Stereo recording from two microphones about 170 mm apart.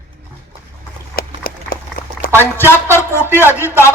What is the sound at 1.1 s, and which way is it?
Run, 60° left (ahead or behind).